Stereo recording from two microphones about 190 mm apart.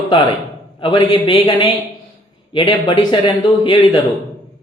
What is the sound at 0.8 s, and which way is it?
Speech, 25° left (ahead or behind).